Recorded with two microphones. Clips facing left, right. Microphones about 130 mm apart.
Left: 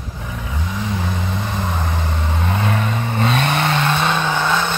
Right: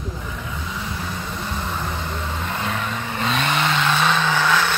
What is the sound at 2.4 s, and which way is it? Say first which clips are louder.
Vehicle: left 7 dB; 40° left (ahead or behind).